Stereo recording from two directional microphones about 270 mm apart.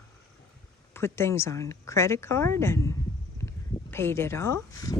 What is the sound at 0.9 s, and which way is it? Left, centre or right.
Speech, centre.